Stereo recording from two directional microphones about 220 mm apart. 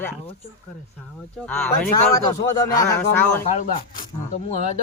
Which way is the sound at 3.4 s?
35° left (ahead or behind).